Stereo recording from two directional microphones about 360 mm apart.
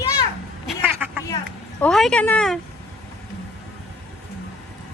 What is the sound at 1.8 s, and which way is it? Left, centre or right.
Speech, centre.